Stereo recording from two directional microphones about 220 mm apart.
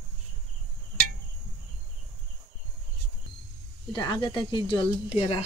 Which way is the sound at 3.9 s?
20° left (ahead or behind).